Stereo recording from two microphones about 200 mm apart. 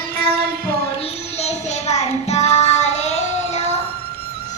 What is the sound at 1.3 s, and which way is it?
Child singing, 35° left (ahead or behind).